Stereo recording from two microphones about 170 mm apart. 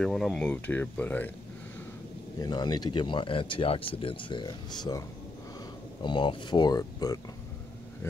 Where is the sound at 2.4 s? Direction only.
25° left (ahead or behind).